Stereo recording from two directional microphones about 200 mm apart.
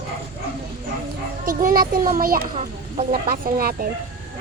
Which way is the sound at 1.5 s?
45° right (ahead or behind).